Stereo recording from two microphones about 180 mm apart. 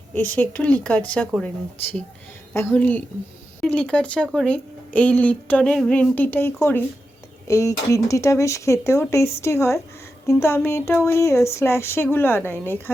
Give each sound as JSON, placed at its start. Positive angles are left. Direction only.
{"t": 0.1, "sound": "speech", "side_deg": 10}
{"t": 2.5, "sound": "speech", "side_deg": 10}